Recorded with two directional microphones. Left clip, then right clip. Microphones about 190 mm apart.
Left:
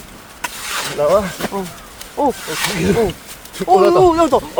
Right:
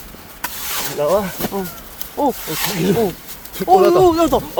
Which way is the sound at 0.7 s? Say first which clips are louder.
Left 3 dB; 10° right (ahead or behind).